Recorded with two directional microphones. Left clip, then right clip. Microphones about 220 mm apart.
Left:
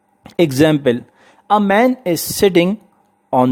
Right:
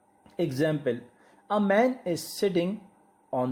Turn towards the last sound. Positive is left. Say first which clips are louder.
# left 15 dB
turn(degrees=40)  # may be behind; listen again after turning